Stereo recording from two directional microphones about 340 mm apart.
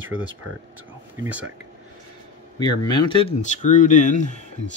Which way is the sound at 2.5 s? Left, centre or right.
Centre.